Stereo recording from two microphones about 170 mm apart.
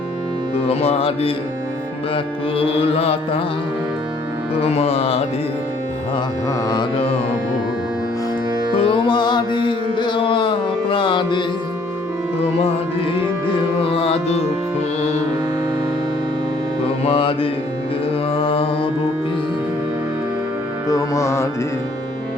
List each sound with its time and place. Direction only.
0.5 s music: 35° left (ahead or behind)
4.6 s music: 35° left (ahead or behind)
6.7 s music: 25° left (ahead or behind)
8.8 s music: 30° left (ahead or behind)
12.6 s music: 35° left (ahead or behind)
16.8 s mantra: 35° left (ahead or behind)
18.3 s music: 30° left (ahead or behind)
20.9 s music: 20° left (ahead or behind)